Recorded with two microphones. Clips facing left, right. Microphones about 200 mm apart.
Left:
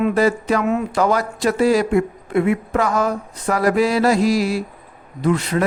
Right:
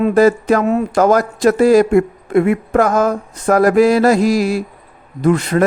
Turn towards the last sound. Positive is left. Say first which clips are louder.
# right 5 dB
turn(degrees=-50)  # may be behind; listen again after turning